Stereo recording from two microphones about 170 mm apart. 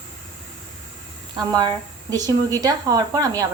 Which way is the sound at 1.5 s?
25° right (ahead or behind).